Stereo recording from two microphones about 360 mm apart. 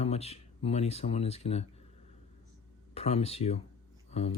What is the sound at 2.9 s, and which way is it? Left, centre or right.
Speech, centre.